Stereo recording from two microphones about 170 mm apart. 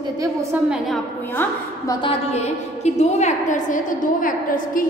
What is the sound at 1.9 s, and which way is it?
A woman's voice, 30° left (ahead or behind).